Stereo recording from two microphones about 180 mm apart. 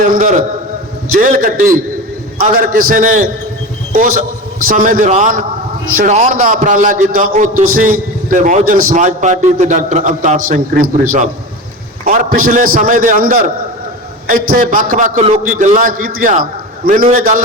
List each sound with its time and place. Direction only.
0.0 s a man's voice: 45° right (ahead or behind)